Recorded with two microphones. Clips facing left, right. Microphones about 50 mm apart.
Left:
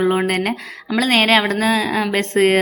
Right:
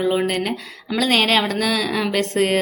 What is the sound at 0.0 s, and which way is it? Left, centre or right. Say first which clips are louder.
A woman's voice: left 3 dB; left.